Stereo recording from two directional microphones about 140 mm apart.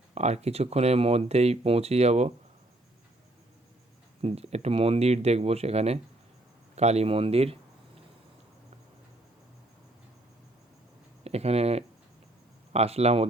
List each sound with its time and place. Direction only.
0.1 s speech: 50° right (ahead or behind)
4.2 s speech: 45° right (ahead or behind)
11.2 s speech: 50° right (ahead or behind)